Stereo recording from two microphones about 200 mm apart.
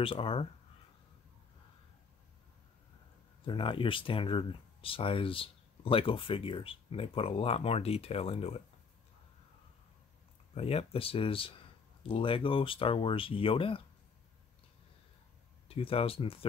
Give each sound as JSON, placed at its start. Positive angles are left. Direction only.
{"t": 0.0, "sound": "speech", "side_deg": 25}
{"t": 3.4, "sound": "speech", "side_deg": 25}
{"t": 10.5, "sound": "speech", "side_deg": 30}
{"t": 15.7, "sound": "speech", "side_deg": 30}